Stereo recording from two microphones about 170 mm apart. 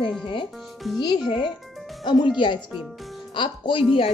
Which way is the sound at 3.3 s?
30° left (ahead or behind).